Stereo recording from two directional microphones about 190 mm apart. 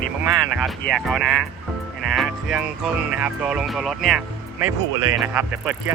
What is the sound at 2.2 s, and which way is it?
Music, 5° right (ahead or behind).